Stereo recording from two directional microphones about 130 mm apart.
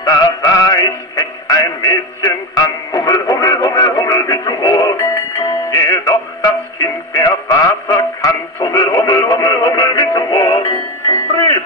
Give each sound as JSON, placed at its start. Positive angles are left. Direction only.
{"t": 0.0, "sound": "music", "side_deg": 30}